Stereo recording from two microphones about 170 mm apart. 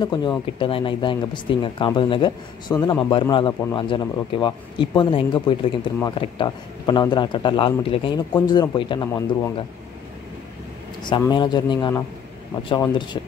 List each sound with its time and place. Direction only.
0.0 s speech: 25° left (ahead or behind)
11.0 s speech: 25° left (ahead or behind)